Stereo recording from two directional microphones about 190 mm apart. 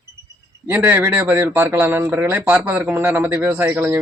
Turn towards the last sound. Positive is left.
turn(degrees=-10)  # may be behind; listen again after turning